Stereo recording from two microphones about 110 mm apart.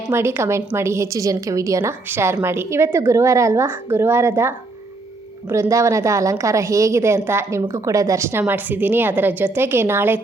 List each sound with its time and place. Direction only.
0.1 s a woman's voice: 20° right (ahead or behind)